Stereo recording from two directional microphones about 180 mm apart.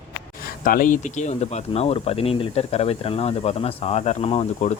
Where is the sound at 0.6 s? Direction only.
50° left (ahead or behind).